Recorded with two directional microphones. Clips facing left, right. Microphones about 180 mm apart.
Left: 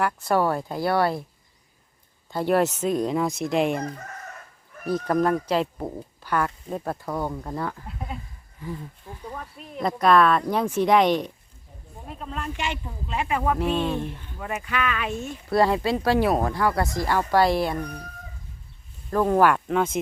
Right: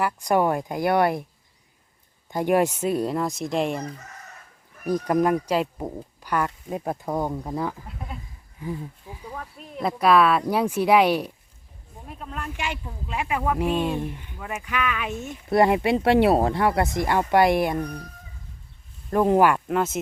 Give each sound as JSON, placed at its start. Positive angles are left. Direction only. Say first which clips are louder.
{"t": 0.0, "sound": "speech", "louder": "right 1 dB", "side_deg": -15}
{"t": 2.3, "sound": "speech", "louder": "right 1 dB", "side_deg": -15}
{"t": 4.9, "sound": "speech", "louder": "right 1 dB", "side_deg": -15}
{"t": 19.1, "sound": "speech", "louder": "right 1 dB", "side_deg": -20}